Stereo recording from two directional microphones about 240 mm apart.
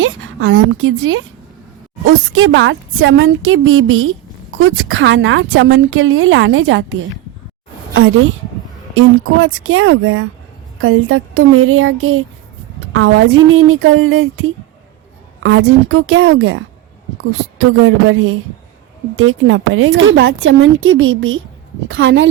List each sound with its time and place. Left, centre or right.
0.0 s a woman's voice: right